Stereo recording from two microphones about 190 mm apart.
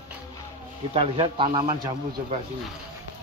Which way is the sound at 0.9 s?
30° right (ahead or behind).